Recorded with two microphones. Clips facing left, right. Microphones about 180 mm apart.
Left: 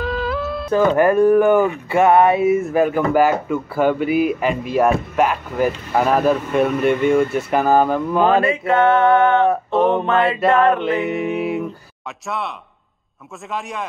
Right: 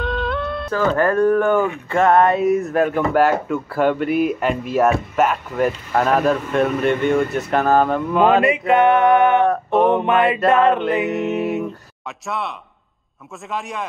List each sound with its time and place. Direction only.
0.0 s music: centre (ahead or behind)
0.7 s speech: 15° left (ahead or behind); by 8.5 s centre (ahead or behind)
8.5 s a sound: 20° right (ahead or behind)
10.5 s music: 20° right (ahead or behind)
11.1 s speech: centre (ahead or behind)